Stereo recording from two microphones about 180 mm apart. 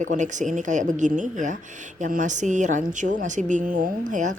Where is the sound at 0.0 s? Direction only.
45° right (ahead or behind).